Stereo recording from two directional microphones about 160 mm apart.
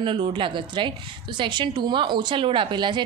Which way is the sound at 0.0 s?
35° right (ahead or behind).